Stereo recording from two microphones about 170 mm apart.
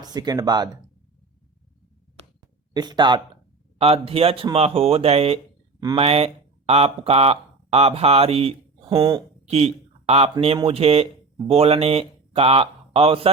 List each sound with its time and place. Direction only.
0.0 s speech: 25° right (ahead or behind)
2.7 s speech: 25° right (ahead or behind)
9.0 s speech: 20° right (ahead or behind)
9.5 s speech: 40° right (ahead or behind)